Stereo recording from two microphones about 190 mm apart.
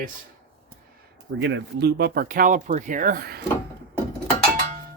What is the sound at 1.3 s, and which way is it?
Speech, 65° right (ahead or behind).